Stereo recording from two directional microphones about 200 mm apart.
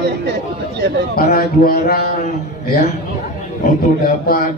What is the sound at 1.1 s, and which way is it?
Speech, 50° left (ahead or behind).